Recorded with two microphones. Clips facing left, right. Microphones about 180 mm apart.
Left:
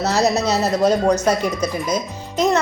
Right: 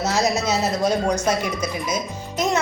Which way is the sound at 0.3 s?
10° right (ahead or behind).